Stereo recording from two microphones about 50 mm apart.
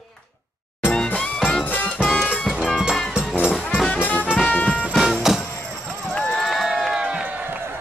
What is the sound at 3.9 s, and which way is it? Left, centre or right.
Music, left.